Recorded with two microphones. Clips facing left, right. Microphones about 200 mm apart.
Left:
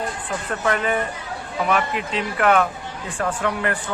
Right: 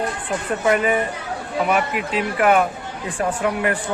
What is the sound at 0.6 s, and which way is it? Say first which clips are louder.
Speech: right 3 dB; 10° right (ahead or behind).